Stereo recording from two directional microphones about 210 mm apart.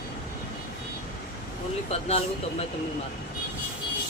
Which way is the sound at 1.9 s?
30° left (ahead or behind).